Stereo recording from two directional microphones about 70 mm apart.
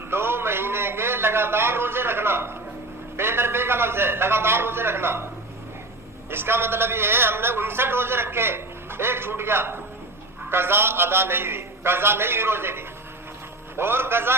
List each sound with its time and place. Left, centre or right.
0.1 s a man's voice: right
6.3 s a man's voice: right